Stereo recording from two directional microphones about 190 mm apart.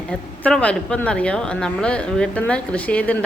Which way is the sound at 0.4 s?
5° left (ahead or behind).